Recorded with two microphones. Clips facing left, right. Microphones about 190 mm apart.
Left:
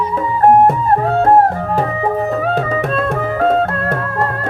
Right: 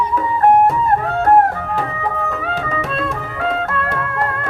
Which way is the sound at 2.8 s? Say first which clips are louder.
Left 6 dB; 50° left (ahead or behind).